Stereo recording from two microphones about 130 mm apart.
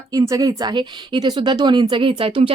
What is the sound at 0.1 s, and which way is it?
Speech, 30° right (ahead or behind).